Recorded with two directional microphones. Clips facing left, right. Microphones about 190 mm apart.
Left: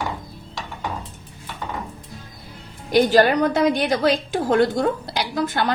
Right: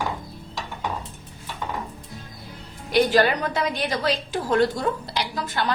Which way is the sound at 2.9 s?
45° left (ahead or behind).